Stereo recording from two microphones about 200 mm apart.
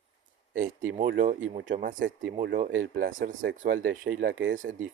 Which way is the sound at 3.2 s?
40° right (ahead or behind).